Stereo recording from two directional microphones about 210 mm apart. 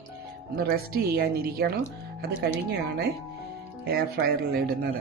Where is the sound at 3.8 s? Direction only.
45° right (ahead or behind).